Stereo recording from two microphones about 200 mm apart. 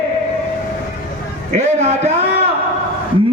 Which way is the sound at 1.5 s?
35° right (ahead or behind).